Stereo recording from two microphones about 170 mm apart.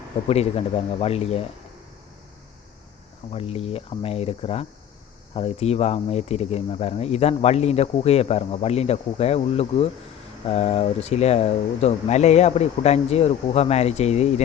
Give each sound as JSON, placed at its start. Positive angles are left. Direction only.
{"t": 0.3, "sound": "speech", "side_deg": 35}
{"t": 3.3, "sound": "speech", "side_deg": 35}